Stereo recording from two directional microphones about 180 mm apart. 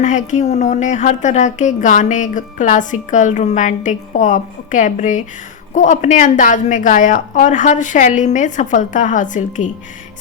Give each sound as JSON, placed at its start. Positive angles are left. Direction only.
{"t": 0.0, "sound": "a woman's voice", "side_deg": 45}